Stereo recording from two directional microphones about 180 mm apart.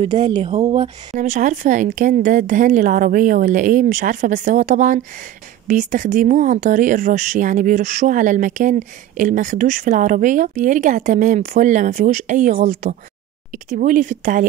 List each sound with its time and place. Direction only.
0.0 s speech: 35° right (ahead or behind)